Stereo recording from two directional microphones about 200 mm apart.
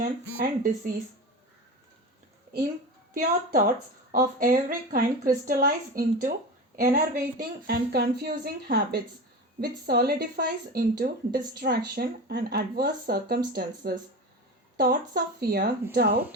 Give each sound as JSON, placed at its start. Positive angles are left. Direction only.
{"t": 0.0, "sound": "a woman's voice", "side_deg": -45}
{"t": 4.1, "sound": "a woman's voice", "side_deg": -45}